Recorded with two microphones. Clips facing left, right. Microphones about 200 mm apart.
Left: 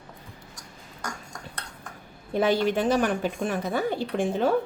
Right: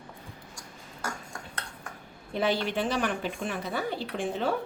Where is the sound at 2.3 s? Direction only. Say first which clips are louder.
Left 5 dB; 45° left (ahead or behind).